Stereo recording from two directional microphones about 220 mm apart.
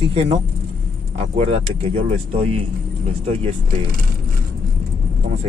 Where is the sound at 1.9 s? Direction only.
25° right (ahead or behind).